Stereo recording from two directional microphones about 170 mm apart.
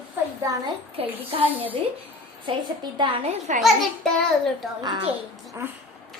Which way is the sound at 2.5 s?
30° right (ahead or behind).